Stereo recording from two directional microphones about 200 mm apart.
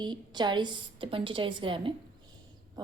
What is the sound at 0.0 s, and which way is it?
A woman's voice, 20° right (ahead or behind).